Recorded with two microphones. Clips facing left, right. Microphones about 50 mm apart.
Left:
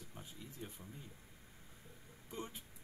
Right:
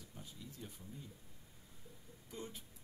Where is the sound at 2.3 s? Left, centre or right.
Left.